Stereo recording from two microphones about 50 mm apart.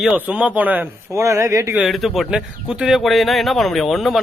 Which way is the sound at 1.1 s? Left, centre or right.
Right.